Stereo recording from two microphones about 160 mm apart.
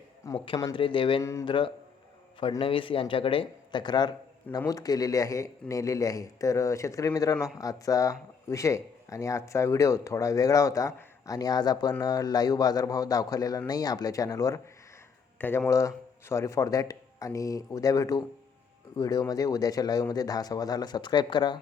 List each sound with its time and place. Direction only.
0.4 s speech: 30° left (ahead or behind)
1.2 s speech: 20° left (ahead or behind)
1.5 s speech: 30° left (ahead or behind)